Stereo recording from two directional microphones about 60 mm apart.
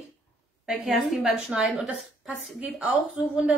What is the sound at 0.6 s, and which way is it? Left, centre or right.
Speech, centre.